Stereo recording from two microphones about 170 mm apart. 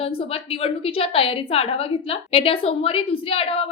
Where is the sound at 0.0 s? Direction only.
35° left (ahead or behind).